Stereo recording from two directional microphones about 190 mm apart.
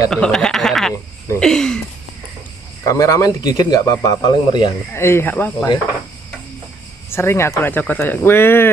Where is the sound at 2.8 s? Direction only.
15° left (ahead or behind).